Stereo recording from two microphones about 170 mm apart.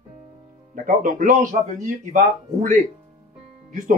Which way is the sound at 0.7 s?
50° right (ahead or behind).